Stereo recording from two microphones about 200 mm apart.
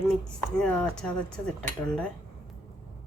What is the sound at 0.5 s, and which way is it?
Speech, 5° left (ahead or behind).